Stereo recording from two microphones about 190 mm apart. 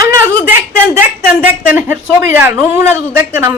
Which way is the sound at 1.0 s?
10° right (ahead or behind).